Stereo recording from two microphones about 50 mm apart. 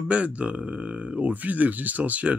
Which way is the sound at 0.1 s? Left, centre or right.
Right.